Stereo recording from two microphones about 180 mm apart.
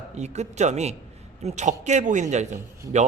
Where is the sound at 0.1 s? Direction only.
40° right (ahead or behind).